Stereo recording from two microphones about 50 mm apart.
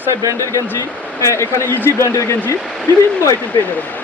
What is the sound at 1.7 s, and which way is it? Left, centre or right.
Speech, left.